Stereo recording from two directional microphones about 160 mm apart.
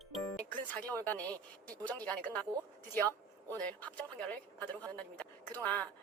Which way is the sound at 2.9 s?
10° left (ahead or behind).